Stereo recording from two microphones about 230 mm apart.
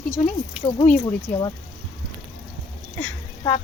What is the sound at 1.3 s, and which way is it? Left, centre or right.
Speech, centre.